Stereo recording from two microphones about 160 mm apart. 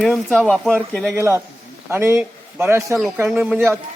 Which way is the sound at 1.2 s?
15° right (ahead or behind).